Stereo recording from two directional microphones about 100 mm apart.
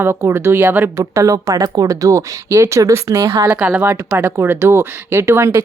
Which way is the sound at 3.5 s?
15° right (ahead or behind).